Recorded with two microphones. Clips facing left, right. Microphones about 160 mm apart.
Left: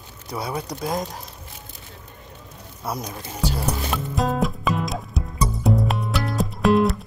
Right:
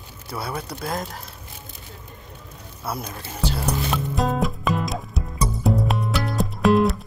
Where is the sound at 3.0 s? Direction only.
10° left (ahead or behind).